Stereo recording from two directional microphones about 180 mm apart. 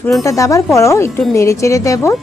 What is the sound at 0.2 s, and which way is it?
Speech, 15° left (ahead or behind).